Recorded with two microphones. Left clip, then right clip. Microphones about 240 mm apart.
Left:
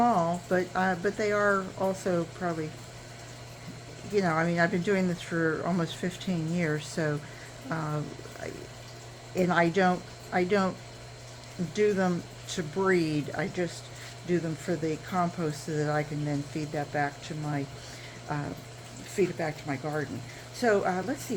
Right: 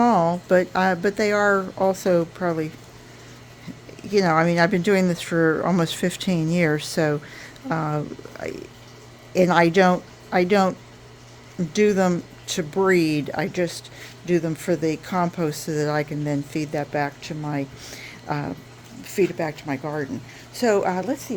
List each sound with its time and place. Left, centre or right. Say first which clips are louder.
0.0 s speech: right 6 dB; right
4.1 s speech: right 8 dB; right
9.3 s speech: right 8 dB; right
11.7 s speech: right 7 dB; right